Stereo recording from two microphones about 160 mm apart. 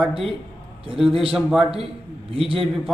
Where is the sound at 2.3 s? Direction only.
35° right (ahead or behind).